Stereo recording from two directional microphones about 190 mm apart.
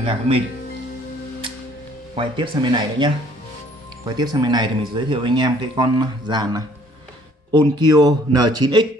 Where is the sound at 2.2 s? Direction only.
25° right (ahead or behind).